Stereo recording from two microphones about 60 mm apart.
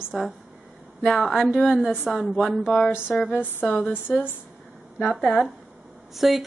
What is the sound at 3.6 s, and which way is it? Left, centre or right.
Speech, centre.